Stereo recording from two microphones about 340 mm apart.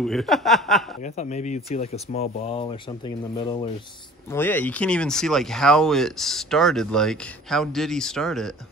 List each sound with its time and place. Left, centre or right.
0.0 s speech: centre
1.0 s speech: left; by 8.5 s centre